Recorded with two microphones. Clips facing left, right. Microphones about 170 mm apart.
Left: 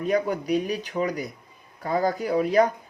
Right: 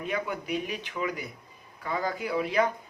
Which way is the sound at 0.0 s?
40° left (ahead or behind).